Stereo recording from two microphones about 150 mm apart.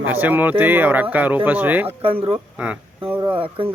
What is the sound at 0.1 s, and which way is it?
Speech, 10° right (ahead or behind).